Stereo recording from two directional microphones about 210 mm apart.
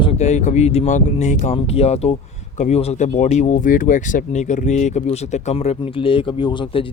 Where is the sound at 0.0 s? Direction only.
30° left (ahead or behind).